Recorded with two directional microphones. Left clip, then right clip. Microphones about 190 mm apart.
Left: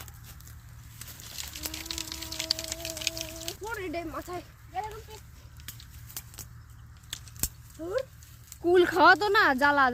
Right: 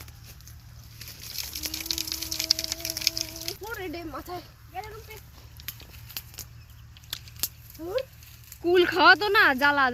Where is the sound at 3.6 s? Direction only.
45° right (ahead or behind).